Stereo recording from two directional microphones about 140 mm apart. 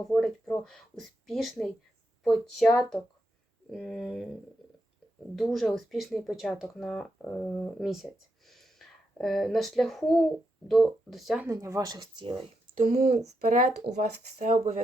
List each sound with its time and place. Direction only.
0.2 s speech: 5° left (ahead or behind)
5.4 s speech: centre (ahead or behind)
11.4 s speech: 20° right (ahead or behind)
12.7 s speech: 85° right
14.3 s speech: 60° right (ahead or behind)